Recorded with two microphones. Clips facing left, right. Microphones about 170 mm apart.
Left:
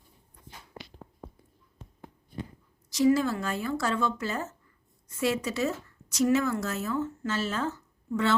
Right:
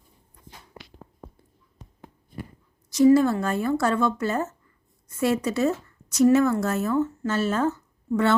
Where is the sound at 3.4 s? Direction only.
50° right (ahead or behind).